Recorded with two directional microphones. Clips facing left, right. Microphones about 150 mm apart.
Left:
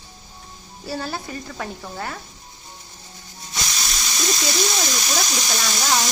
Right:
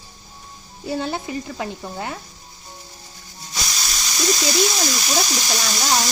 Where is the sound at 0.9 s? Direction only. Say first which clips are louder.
Right 4 dB; 20° right (ahead or behind).